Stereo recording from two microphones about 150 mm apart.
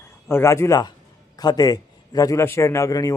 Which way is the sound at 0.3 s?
15° left (ahead or behind).